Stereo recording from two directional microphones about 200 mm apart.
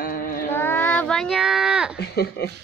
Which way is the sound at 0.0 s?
45° left (ahead or behind).